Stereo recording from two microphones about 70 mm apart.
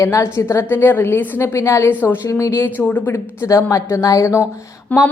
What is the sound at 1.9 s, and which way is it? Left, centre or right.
Speech, left.